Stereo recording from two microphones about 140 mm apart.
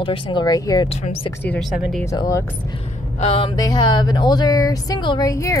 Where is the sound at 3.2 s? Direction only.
40° left (ahead or behind).